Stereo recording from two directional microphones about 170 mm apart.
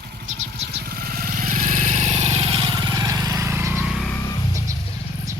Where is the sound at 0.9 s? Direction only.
60° right (ahead or behind); by 3.8 s 15° right (ahead or behind).